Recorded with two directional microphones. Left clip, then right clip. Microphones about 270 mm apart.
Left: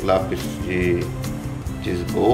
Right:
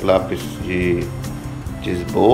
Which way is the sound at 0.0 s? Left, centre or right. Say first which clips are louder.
Right 3 dB; centre.